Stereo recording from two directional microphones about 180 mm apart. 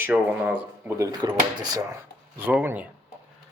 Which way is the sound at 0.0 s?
10° right (ahead or behind).